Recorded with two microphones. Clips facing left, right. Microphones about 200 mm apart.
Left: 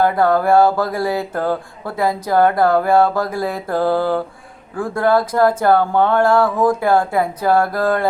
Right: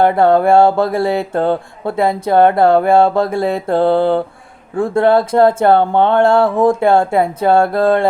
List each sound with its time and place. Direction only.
0.0 s speech: 25° right (ahead or behind)